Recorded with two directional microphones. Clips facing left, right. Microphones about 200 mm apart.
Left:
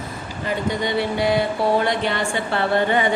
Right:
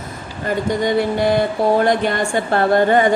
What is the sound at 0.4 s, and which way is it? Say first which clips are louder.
A woman's voice: right 5 dB; 45° right (ahead or behind).